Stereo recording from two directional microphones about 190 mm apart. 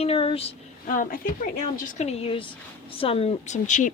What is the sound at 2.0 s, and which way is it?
A woman's voice, 30° left (ahead or behind).